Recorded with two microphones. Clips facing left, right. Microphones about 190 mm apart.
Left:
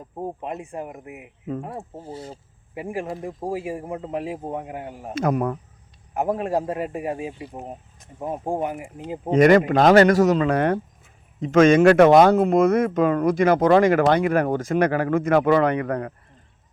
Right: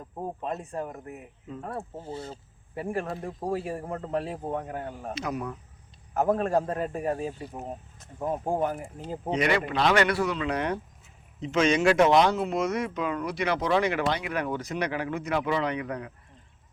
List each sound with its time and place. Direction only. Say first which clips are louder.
0.2 s speech: left 3 dB; 15° left (ahead or behind)
2.0 s speech: left 1 dB; 25° left (ahead or behind)
2.3 s speech: left 2 dB; 15° left (ahead or behind)
5.1 s speech: left 12 dB; 50° left (ahead or behind)
6.1 s speech: left 1 dB; 15° left (ahead or behind)
9.3 s speech: left 11 dB; 45° left (ahead or behind)